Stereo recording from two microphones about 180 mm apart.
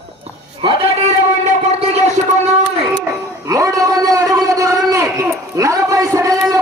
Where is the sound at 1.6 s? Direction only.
35° right (ahead or behind).